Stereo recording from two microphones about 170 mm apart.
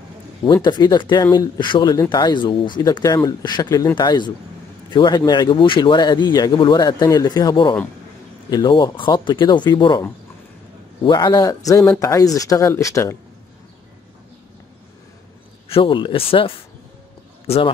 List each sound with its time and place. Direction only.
0.5 s speech: 25° left (ahead or behind)
11.1 s speech: 25° left (ahead or behind)
15.7 s speech: 30° left (ahead or behind)